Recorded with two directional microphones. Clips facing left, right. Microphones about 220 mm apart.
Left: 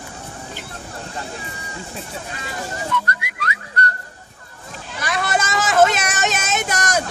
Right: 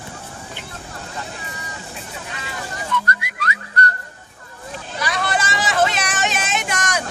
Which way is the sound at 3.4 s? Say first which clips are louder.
Right 1 dB; 40° right (ahead or behind).